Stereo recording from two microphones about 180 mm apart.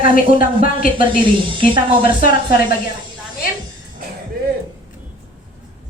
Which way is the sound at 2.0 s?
55° left (ahead or behind).